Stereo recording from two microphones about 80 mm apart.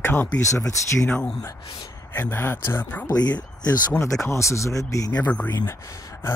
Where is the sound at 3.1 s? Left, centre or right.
Left.